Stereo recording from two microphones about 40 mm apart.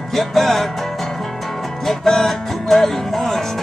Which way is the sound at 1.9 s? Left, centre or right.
Centre.